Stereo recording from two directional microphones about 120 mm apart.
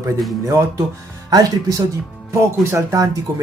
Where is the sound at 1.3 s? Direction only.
30° right (ahead or behind).